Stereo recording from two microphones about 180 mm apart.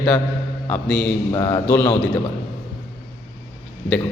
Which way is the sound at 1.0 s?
20° left (ahead or behind).